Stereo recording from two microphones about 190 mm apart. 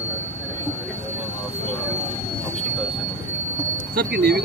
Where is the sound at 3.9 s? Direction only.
55° right (ahead or behind).